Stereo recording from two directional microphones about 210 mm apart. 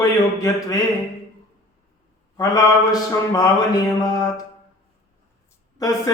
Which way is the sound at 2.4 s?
20° left (ahead or behind).